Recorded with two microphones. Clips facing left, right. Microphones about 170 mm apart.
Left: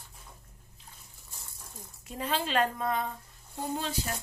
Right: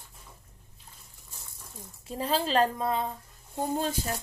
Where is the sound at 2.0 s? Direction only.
30° right (ahead or behind).